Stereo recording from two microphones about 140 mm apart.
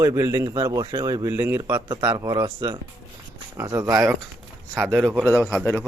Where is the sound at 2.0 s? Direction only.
35° right (ahead or behind).